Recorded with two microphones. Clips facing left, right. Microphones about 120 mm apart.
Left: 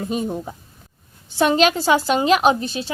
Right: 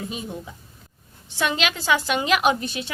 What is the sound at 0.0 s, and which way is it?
A woman's voice, 45° left (ahead or behind).